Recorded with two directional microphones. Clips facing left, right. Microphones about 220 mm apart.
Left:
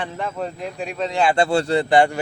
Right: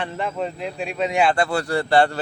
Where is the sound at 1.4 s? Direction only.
25° left (ahead or behind).